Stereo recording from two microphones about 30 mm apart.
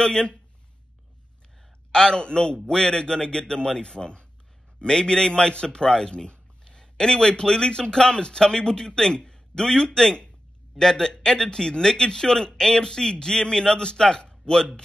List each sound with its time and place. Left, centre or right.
0.0 s speech: left
1.9 s speech: left